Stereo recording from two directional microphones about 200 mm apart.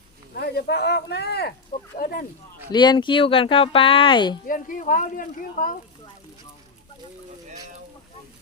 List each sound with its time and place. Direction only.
0.3 s speech: 55° left (ahead or behind)
2.7 s speech: 20° left (ahead or behind)
4.4 s speech: 40° left (ahead or behind)